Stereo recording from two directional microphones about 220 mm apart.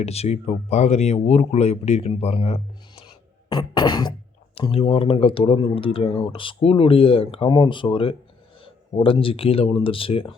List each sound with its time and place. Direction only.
0.0 s speech: 30° left (ahead or behind)